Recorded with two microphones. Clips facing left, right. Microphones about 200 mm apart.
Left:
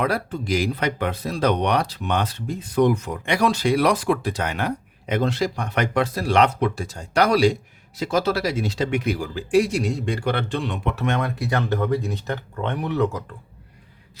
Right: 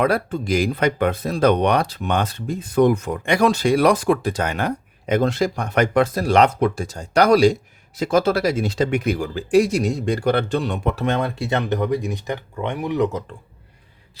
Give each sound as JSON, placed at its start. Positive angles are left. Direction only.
{"t": 0.0, "sound": "speech", "side_deg": -55}